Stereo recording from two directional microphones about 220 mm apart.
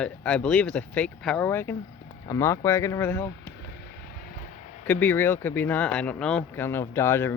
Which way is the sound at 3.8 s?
45° left (ahead or behind).